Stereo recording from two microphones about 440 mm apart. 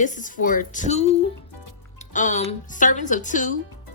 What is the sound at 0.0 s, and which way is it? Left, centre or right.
Speech, centre.